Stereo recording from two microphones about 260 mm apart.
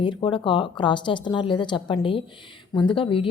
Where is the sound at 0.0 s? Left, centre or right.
Centre.